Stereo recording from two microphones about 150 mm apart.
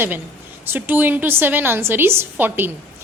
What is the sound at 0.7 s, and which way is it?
A woman's voice, 15° right (ahead or behind).